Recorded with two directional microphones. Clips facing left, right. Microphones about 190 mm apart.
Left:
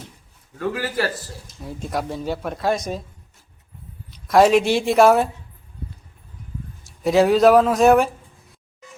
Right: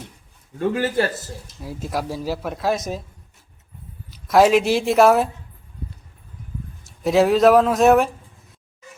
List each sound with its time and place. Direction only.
0.6 s a man's voice: 25° right (ahead or behind)
1.5 s speech: centre (ahead or behind)
4.1 s speech: centre (ahead or behind)
6.8 s speech: centre (ahead or behind)